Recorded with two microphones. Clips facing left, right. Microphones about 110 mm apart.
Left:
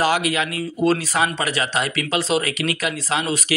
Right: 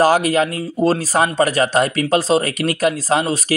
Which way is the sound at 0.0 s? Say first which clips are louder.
Right 6 dB; 40° right (ahead or behind).